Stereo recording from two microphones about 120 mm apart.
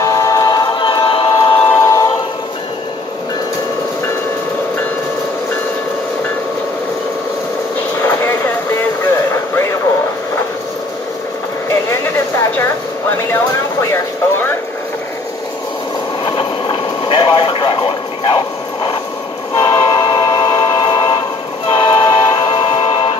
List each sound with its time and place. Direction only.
0.0 s a capella: 30° left (ahead or behind); by 1.7 s 50° left (ahead or behind)
1.8 s choir: 25° left (ahead or behind)
7.9 s vehicle: 15° left (ahead or behind)
12.5 s vehicle: 20° left (ahead or behind)
16.3 s vehicle: 40° left (ahead or behind)
19.5 s train: 40° left (ahead or behind)